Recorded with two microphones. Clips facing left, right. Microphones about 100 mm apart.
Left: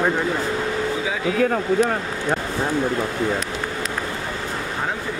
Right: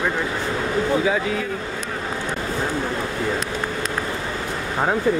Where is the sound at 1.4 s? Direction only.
60° left (ahead or behind).